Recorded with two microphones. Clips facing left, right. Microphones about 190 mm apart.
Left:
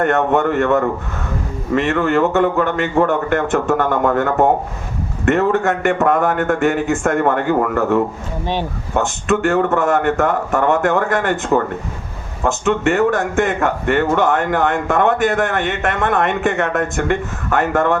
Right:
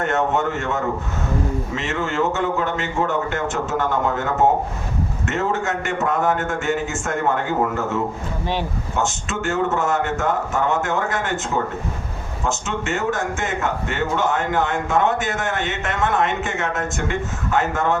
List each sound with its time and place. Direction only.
0.0 s a man's voice: 55° left (ahead or behind)